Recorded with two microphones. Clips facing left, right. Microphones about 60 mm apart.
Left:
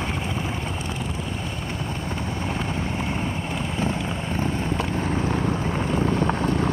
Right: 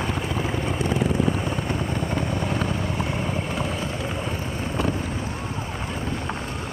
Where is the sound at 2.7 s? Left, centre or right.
Left.